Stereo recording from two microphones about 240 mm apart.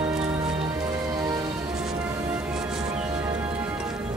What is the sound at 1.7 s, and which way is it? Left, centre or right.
Music, centre.